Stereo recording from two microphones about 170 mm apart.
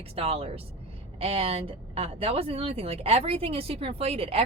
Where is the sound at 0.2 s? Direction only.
35° right (ahead or behind).